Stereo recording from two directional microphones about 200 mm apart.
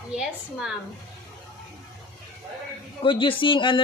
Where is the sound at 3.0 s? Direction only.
25° left (ahead or behind).